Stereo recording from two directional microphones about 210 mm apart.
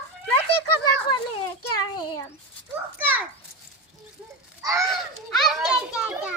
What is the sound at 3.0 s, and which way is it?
Speech, 10° right (ahead or behind).